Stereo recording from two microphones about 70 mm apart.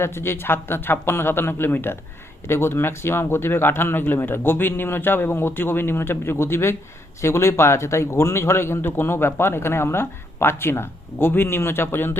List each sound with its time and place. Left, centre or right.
0.0 s speech: left